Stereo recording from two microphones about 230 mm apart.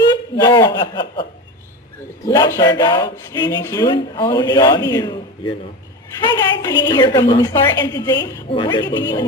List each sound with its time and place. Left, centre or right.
0.3 s a woman's voice: centre